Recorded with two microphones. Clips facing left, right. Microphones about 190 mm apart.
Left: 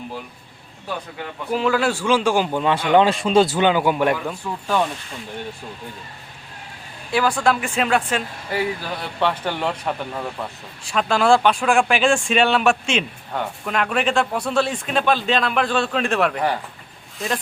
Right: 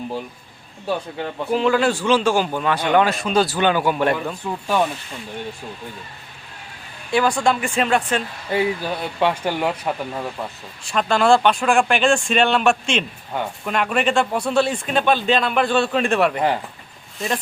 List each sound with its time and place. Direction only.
1.5 s a man's voice: 5° left (ahead or behind)
4.6 s speech: 10° right (ahead or behind)
7.1 s speech: 5° left (ahead or behind)
8.4 s speech: 15° right (ahead or behind); by 17.4 s centre (ahead or behind)